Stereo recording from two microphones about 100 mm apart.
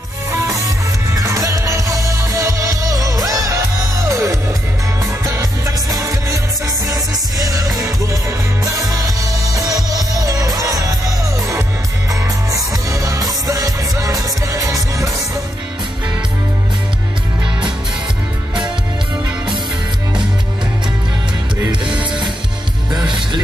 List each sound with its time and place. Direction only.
0.3 s music: 35° right (ahead or behind)
12.1 s music: 35° right (ahead or behind)
22.8 s music: 50° right (ahead or behind)